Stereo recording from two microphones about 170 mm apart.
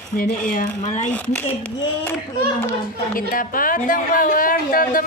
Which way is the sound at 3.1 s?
55° left (ahead or behind).